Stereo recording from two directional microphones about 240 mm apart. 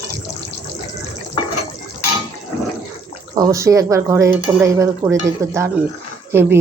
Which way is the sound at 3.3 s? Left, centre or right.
Centre.